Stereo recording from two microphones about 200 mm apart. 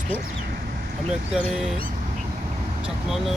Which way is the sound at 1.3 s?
Centre (ahead or behind).